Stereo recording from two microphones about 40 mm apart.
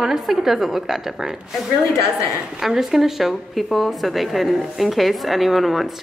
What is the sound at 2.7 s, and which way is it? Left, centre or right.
A woman's voice, centre.